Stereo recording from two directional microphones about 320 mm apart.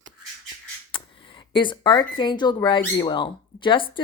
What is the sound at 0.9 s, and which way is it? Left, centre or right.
Speech, centre.